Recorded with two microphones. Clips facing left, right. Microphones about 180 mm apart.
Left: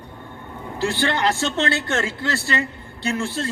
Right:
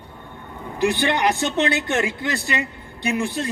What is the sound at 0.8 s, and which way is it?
Speech, 15° right (ahead or behind).